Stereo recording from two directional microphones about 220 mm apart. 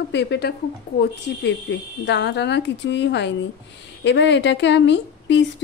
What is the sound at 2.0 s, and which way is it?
A woman's voice, 55° left (ahead or behind).